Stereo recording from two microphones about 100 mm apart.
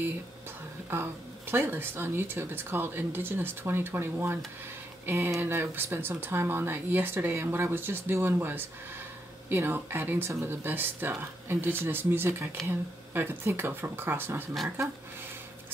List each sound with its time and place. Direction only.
0.9 s speech: 25° right (ahead or behind)